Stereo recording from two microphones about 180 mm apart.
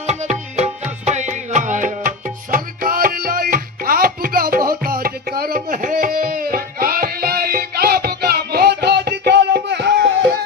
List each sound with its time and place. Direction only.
0.5 s music: 40° right (ahead or behind); by 10.1 s 70° right (ahead or behind)